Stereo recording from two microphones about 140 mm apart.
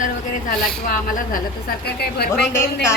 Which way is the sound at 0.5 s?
75° left (ahead or behind).